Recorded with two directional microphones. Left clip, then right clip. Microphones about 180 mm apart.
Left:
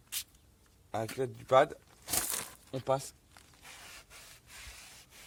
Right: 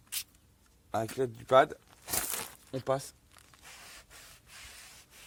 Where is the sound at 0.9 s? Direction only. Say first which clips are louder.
Right 3 dB; 35° right (ahead or behind).